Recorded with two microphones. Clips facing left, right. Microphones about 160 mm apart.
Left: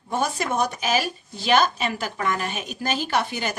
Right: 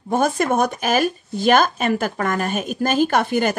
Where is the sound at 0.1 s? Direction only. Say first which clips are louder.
Right 6 dB; 50° right (ahead or behind).